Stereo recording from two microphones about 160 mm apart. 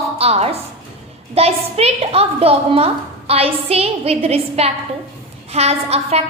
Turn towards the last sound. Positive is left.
turn(degrees=-40)  # may be behind; listen again after turning